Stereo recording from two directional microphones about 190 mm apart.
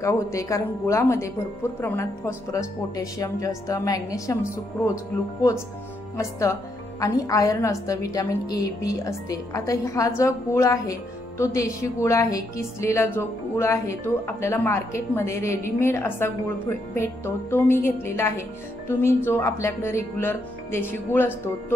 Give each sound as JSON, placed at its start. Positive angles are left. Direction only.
{"t": 0.0, "sound": "a woman's voice", "side_deg": 15}
{"t": 7.0, "sound": "a woman's voice", "side_deg": 15}